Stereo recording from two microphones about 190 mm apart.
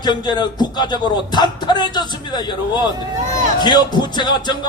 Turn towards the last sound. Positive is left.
turn(degrees=20)  # may be behind; listen again after turning